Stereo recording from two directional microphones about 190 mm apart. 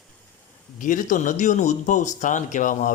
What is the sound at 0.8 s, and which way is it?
Speech, 45° left (ahead or behind).